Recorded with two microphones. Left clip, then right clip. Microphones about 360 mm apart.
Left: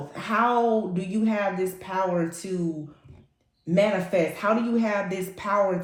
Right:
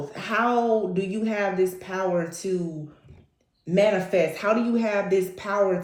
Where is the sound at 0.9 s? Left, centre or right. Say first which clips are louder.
Right 1 dB; centre.